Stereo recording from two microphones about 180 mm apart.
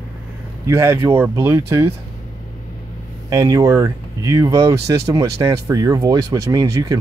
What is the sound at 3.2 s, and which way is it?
Speech, 20° right (ahead or behind).